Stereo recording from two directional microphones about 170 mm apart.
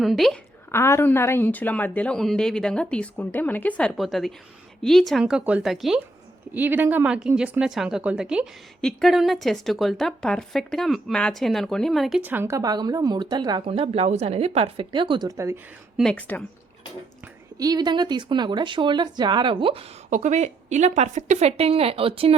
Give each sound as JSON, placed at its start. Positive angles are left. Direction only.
{"t": 0.0, "sound": "speech", "side_deg": 0}
{"t": 0.7, "sound": "a woman's voice", "side_deg": 15}
{"t": 16.0, "sound": "a woman's voice", "side_deg": 5}
{"t": 17.6, "sound": "speech", "side_deg": -25}
{"t": 20.1, "sound": "a woman's voice", "side_deg": -45}